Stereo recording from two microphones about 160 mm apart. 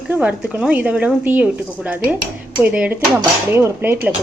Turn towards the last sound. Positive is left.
turn(degrees=-15)  # may be behind; listen again after turning